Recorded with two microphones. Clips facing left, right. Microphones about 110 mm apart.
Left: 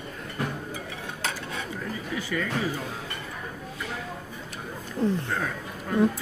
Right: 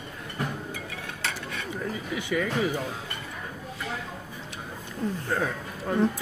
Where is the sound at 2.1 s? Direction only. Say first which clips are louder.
Right 2 dB; 15° right (ahead or behind).